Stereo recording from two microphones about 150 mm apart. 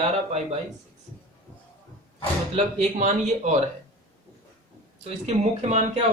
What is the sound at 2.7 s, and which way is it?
Speech, 50° right (ahead or behind).